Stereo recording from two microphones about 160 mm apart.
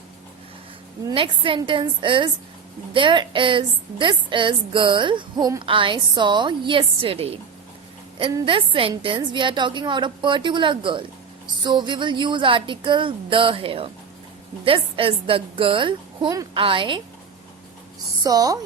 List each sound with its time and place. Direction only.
1.0 s a woman's voice: 35° right (ahead or behind)
18.2 s speech: 25° right (ahead or behind)